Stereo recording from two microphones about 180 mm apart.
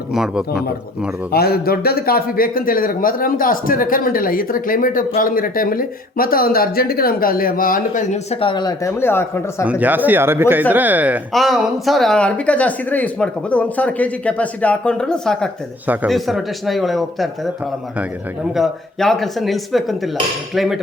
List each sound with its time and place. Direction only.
0.1 s speech: centre (ahead or behind)
1.3 s speech: 60° left (ahead or behind); by 9.6 s 10° left (ahead or behind)
9.6 s speech: 10° right (ahead or behind)
18.5 s speech: centre (ahead or behind)